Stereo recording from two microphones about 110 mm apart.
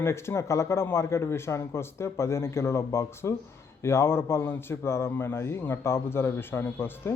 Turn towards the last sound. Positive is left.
turn(degrees=20)  # may be behind; listen again after turning